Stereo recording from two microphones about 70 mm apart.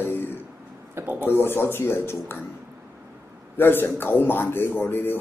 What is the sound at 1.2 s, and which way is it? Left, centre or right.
Speech, left.